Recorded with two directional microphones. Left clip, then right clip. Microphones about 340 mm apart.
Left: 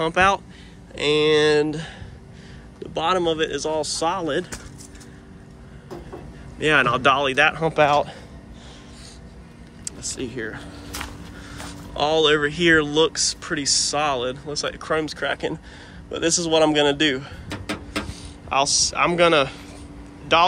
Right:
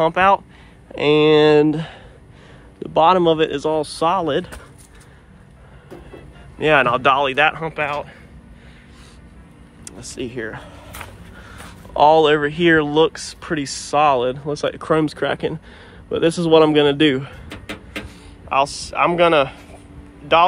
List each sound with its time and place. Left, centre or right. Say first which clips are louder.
0.0 s speech: right 4 dB; centre
6.6 s speech: right 3 dB; centre
9.8 s speech: right 1 dB; centre
11.5 s a man's voice: right 9 dB; centre
17.5 s a sound: left 2 dB; left
18.5 s speech: right 1 dB; centre